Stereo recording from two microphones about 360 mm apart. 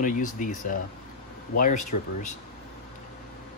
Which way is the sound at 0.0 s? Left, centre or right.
Left.